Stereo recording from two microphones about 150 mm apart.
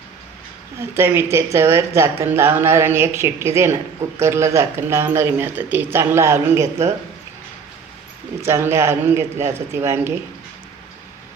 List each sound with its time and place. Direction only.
0.8 s speech: 15° right (ahead or behind)
8.4 s speech: 15° right (ahead or behind)